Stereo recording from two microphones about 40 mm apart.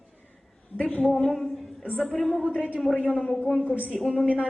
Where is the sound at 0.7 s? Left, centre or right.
Left.